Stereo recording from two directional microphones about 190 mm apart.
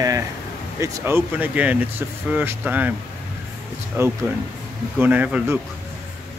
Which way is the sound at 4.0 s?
10° right (ahead or behind).